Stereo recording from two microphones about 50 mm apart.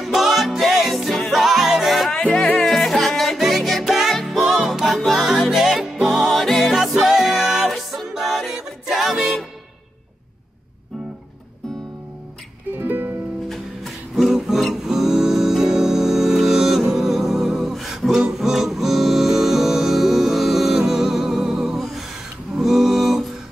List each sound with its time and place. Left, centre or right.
0.0 s music: centre
6.4 s music: centre
12.7 s music: right
13.5 s music: centre